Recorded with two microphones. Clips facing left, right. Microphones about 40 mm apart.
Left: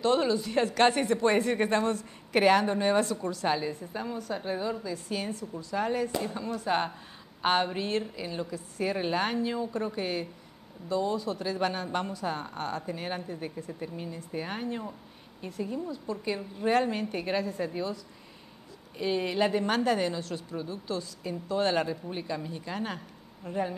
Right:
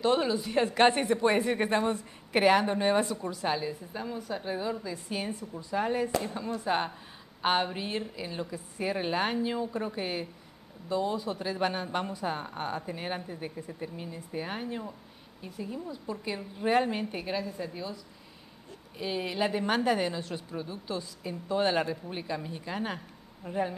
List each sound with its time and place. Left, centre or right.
0.0 s a woman's voice: centre
3.4 s speech: centre
4.9 s a woman's voice: centre
6.7 s a woman's voice: centre
16.3 s speech: centre
17.2 s a woman's voice: centre
18.9 s a woman's voice: centre